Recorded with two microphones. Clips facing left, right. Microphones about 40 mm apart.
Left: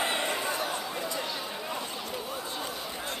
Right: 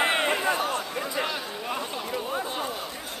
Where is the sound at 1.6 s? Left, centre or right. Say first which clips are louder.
Right 4 dB; right.